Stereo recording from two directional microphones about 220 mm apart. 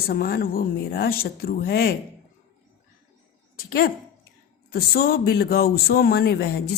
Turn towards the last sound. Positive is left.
turn(degrees=45)  # may be behind; listen again after turning